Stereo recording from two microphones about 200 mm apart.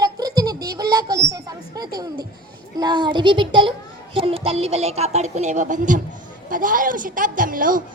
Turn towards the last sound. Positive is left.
turn(degrees=-45)  # may be behind; listen again after turning